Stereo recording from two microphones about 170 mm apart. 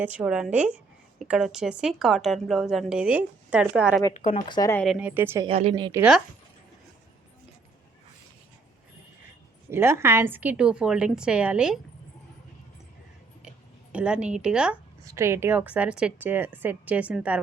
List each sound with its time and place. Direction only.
0.0 s a woman's voice: 10° right (ahead or behind)
4.2 s speech: 30° left (ahead or behind)
4.7 s speech: 5° left (ahead or behind)
4.9 s a woman's voice: 10° right (ahead or behind)
5.5 s a woman's voice: 35° right (ahead or behind)
6.0 s speech: centre (ahead or behind)
9.6 s a woman's voice: 15° right (ahead or behind)
13.9 s speech: 5° right (ahead or behind)
15.0 s a woman's voice: 15° right (ahead or behind)